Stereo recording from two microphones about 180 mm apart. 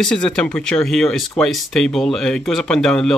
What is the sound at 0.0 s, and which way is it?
Speech, 5° left (ahead or behind).